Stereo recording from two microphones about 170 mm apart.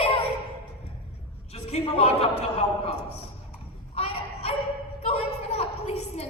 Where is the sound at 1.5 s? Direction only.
35° left (ahead or behind).